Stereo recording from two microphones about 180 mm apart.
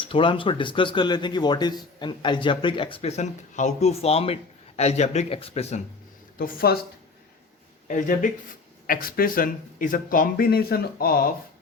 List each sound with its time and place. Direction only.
0.0 s speech: 30° left (ahead or behind)
6.4 s speech: 60° left (ahead or behind)
7.9 s speech: 45° left (ahead or behind)